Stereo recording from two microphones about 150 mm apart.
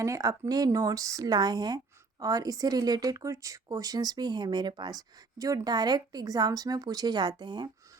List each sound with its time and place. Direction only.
0.0 s speech: 20° right (ahead or behind)